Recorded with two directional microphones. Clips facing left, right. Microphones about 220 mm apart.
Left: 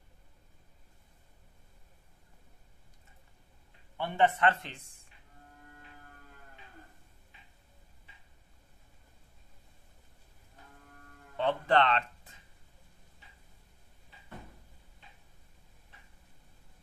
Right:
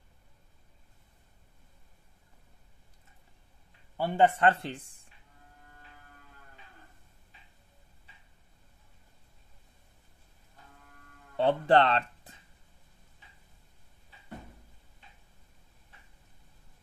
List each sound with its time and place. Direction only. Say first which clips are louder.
3.9 s a man's voice: right 3 dB; 30° right (ahead or behind)
11.3 s speech: right 4 dB; 35° right (ahead or behind)